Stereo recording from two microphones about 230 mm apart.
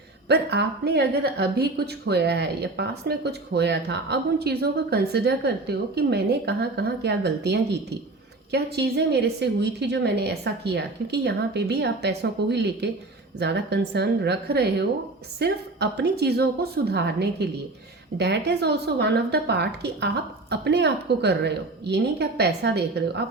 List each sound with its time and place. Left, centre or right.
0.3 s a woman's voice: right